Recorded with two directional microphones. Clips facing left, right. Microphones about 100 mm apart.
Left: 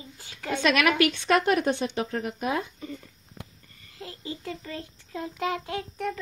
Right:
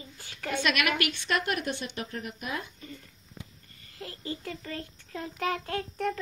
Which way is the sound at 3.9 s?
20° left (ahead or behind).